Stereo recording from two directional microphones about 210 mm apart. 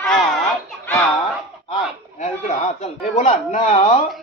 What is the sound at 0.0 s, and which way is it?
Children playing, centre (ahead or behind).